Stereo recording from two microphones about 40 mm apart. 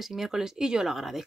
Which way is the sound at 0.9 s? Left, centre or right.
Centre.